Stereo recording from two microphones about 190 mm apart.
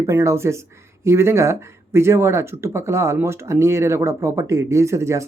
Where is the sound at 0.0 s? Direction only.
15° right (ahead or behind).